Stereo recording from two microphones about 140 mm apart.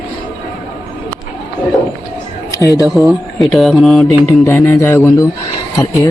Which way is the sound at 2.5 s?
25° left (ahead or behind).